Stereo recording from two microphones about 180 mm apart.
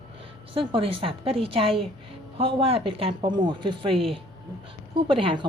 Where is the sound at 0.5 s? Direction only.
30° right (ahead or behind).